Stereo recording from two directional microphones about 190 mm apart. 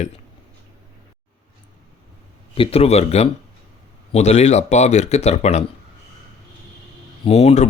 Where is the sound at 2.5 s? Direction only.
30° left (ahead or behind).